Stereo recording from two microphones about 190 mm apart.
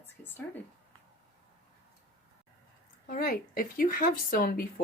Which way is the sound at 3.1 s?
45° left (ahead or behind).